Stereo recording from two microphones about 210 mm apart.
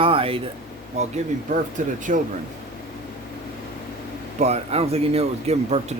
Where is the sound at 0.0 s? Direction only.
25° right (ahead or behind).